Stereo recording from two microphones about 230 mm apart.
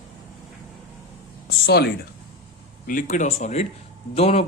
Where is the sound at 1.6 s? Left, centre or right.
Left.